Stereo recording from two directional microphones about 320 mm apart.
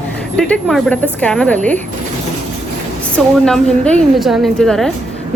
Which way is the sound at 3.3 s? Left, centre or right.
Centre.